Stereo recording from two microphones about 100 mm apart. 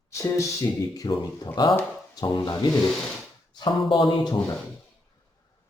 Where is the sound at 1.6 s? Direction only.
50° left (ahead or behind).